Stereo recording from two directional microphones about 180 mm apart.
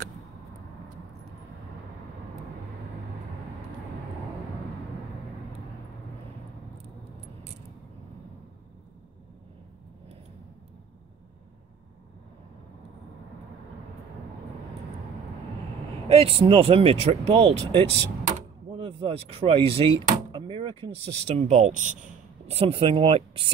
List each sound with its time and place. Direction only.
16.1 s speech: 30° right (ahead or behind)